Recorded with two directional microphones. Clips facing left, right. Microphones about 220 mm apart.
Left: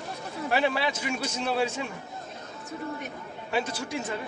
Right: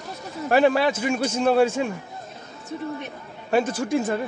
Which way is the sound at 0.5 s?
50° right (ahead or behind).